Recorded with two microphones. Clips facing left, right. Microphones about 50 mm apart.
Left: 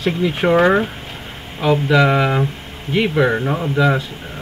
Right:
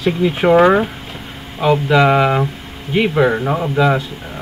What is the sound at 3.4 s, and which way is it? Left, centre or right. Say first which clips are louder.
Speech: right 2 dB; centre.